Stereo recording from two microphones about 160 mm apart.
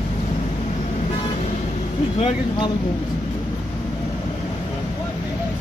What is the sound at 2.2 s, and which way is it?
Speech, 35° left (ahead or behind).